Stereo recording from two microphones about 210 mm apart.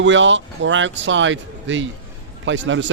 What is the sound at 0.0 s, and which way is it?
Speech, 60° right (ahead or behind).